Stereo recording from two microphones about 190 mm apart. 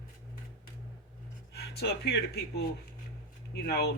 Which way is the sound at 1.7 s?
55° left (ahead or behind).